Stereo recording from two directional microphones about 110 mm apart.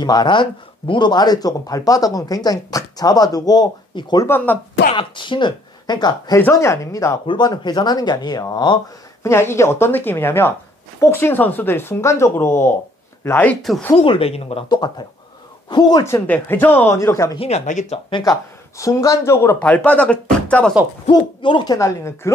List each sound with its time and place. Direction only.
0.0 s speech: 40° left (ahead or behind)
6.5 s speech: 25° left (ahead or behind)
7.2 s speech: 40° left (ahead or behind)
9.2 s speech: 25° left (ahead or behind)
13.6 s speech: centre (ahead or behind)
13.9 s speech: 60° left (ahead or behind)
14.7 s speech: 40° left (ahead or behind)
16.1 s speech: 20° left (ahead or behind)
17.4 s speech: 75° left (ahead or behind)
18.2 s speech: 30° left (ahead or behind)
19.6 s speech: 15° left (ahead or behind)
21.1 s speech: 45° left (ahead or behind)
21.7 s speech: 25° left (ahead or behind)